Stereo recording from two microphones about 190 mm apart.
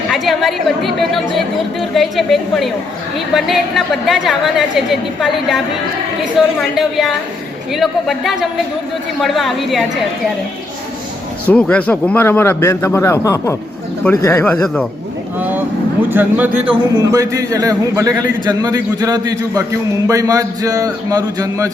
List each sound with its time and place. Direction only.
0.1 s a woman's voice: centre (ahead or behind)
11.4 s a man's voice: 5° left (ahead or behind)
14.5 s a woman's voice: 5° left (ahead or behind)
15.4 s a sound: 10° right (ahead or behind)
16.0 s a man's voice: 10° right (ahead or behind)